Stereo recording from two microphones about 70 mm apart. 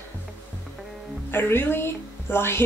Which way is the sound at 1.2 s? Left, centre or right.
Left.